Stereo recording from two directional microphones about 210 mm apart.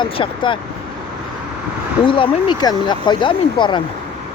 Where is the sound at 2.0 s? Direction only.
25° left (ahead or behind).